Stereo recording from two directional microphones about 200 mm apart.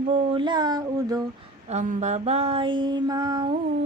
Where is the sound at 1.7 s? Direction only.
35° right (ahead or behind); by 3.5 s 20° right (ahead or behind).